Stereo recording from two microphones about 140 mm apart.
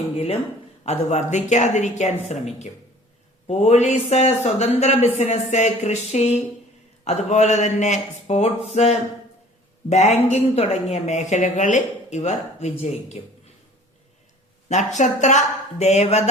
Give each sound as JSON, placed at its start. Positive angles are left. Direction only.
{"t": 0.9, "sound": "a woman's voice", "side_deg": 55}
{"t": 14.7, "sound": "a woman's voice", "side_deg": 60}